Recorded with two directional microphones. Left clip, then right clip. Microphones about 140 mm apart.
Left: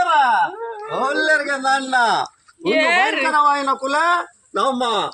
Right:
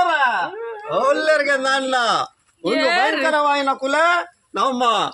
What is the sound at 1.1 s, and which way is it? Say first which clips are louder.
A man's voice: right 1 dB; 25° right (ahead or behind).